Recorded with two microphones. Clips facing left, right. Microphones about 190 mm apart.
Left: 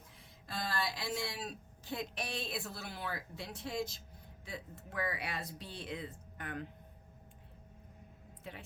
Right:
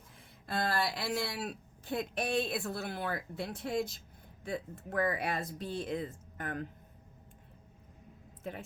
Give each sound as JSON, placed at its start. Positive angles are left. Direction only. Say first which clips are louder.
{"t": 0.4, "sound": "speech", "louder": "right 6 dB", "side_deg": -55}
{"t": 8.4, "sound": "speech", "louder": "right 7 dB", "side_deg": -50}